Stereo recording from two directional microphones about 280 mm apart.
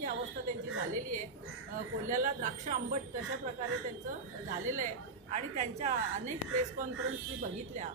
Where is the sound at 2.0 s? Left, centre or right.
Right.